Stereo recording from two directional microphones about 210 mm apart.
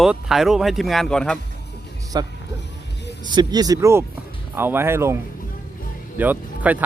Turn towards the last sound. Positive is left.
turn(degrees=-10)  # may be behind; listen again after turning